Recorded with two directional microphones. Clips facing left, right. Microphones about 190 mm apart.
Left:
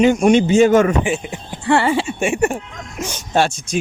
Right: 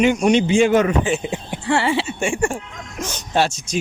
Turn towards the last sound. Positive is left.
turn(degrees=55)  # may be behind; listen again after turning